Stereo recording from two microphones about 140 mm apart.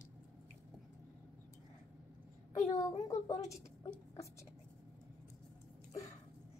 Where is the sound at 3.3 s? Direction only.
55° left (ahead or behind).